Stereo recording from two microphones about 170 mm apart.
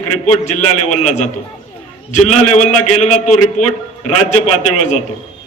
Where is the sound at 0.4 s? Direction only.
45° left (ahead or behind).